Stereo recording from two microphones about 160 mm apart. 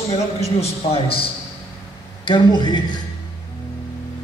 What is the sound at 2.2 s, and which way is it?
Speech, 30° left (ahead or behind).